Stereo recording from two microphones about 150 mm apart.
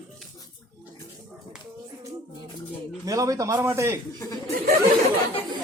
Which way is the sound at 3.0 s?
25° right (ahead or behind).